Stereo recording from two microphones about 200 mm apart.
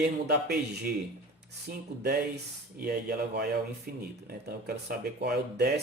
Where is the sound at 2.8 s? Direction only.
50° right (ahead or behind).